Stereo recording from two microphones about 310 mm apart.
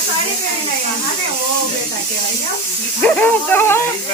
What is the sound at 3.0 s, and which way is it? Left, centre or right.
Dog, centre.